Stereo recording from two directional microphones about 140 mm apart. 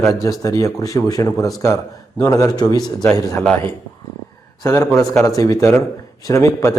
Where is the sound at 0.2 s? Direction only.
25° left (ahead or behind).